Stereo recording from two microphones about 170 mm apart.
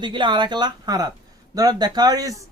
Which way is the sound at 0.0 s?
25° right (ahead or behind).